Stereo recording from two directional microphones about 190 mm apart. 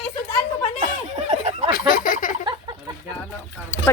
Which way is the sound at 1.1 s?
35° right (ahead or behind).